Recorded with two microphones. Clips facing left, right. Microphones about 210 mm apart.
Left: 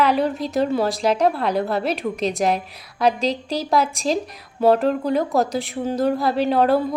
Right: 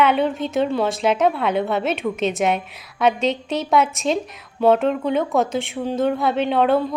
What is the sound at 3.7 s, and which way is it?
Speech, centre (ahead or behind).